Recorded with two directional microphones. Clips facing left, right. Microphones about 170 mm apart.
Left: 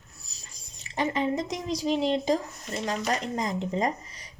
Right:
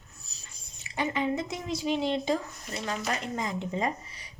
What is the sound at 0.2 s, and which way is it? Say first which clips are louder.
A woman's voice: left 2 dB; 35° left (ahead or behind).